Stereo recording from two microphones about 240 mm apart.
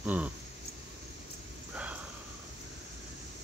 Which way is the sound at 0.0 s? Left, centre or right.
Centre.